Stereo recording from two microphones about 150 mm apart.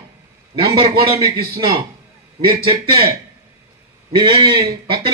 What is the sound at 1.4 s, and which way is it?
Speech, 90° right.